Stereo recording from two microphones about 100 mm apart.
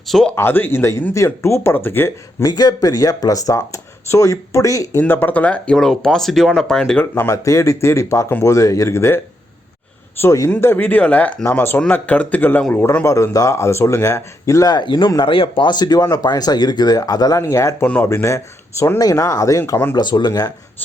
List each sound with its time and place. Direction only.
0.1 s speech: 5° left (ahead or behind)
0.3 s speech: 20° left (ahead or behind)
2.4 s speech: 40° left (ahead or behind)
5.0 s speech: 20° left (ahead or behind)
5.7 s speech: 5° left (ahead or behind)
7.0 s speech: 25° left (ahead or behind)
8.3 s speech: 20° left (ahead or behind)
8.5 s speech: 35° left (ahead or behind)
13.1 s speech: 30° left (ahead or behind); by 15.1 s 50° left (ahead or behind)
15.2 s speech: 60° left (ahead or behind); by 19.8 s 30° left (ahead or behind)
20.0 s speech: 45° left (ahead or behind)